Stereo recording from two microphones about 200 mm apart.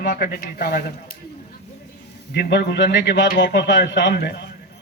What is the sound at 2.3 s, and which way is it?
A man's voice, 55° left (ahead or behind).